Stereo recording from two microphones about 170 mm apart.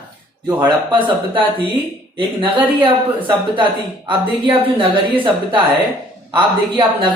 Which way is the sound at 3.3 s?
30° right (ahead or behind).